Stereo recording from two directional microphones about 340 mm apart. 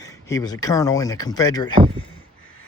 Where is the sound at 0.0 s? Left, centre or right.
Centre.